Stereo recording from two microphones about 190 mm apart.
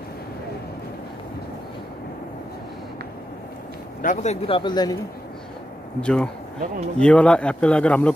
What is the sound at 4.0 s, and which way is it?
Speech, 45° left (ahead or behind).